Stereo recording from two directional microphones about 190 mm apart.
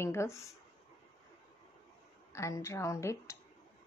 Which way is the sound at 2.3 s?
15° left (ahead or behind).